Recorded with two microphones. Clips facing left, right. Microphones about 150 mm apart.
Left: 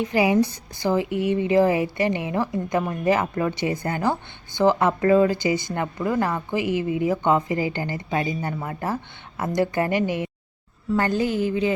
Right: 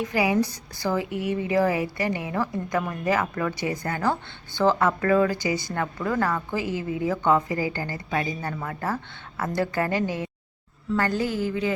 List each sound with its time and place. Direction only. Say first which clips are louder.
0.0 s a woman's voice: left 3 dB; 25° left (ahead or behind)